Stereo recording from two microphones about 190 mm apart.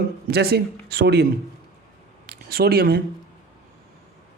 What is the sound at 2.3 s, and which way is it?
Speech, 55° right (ahead or behind).